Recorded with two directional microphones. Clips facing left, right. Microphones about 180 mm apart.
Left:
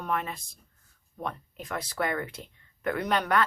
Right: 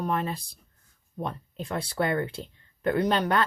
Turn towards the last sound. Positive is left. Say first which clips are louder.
# right 2 dB
turn(degrees=-30)  # may be behind; listen again after turning